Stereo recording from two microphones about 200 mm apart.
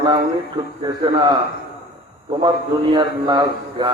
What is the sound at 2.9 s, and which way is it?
A man's voice, 20° right (ahead or behind).